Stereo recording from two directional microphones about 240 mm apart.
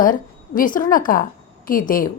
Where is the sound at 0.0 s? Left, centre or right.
Left.